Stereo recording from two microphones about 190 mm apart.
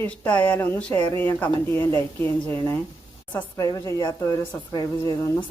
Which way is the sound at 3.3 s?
15° left (ahead or behind).